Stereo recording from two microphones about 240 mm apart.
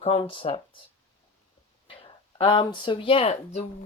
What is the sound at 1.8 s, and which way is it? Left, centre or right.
Speech, left.